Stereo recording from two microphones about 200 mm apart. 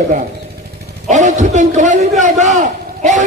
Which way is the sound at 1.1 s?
35° right (ahead or behind).